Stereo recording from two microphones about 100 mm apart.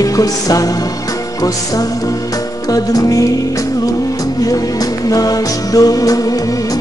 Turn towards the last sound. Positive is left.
turn(degrees=35)  # may be behind; listen again after turning